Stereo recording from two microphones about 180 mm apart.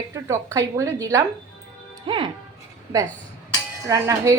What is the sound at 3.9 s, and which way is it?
Speech, 20° right (ahead or behind).